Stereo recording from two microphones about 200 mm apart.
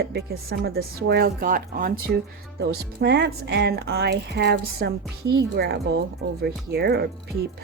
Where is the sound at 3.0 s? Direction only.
55° right (ahead or behind).